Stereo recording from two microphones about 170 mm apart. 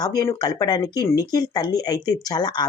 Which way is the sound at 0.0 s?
20° left (ahead or behind).